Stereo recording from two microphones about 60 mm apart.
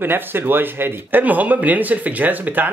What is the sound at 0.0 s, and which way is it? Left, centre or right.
Speech, right.